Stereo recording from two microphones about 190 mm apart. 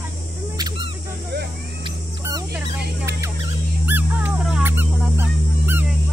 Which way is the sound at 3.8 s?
10° right (ahead or behind).